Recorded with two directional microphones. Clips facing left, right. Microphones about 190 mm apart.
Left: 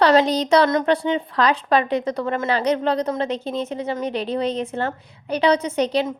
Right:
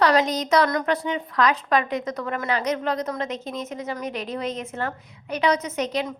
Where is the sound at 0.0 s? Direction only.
30° left (ahead or behind).